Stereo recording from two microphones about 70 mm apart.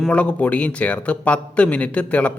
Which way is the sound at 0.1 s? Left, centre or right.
Left.